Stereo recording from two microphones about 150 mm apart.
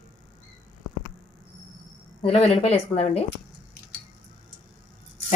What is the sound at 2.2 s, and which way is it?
Speech, 40° left (ahead or behind).